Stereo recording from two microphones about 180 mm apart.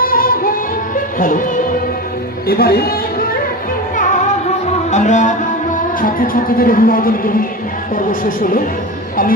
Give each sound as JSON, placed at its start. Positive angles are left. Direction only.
{"t": 0.0, "sound": "music", "side_deg": 55}
{"t": 2.5, "sound": "speech", "side_deg": 60}
{"t": 4.9, "sound": "music", "side_deg": 40}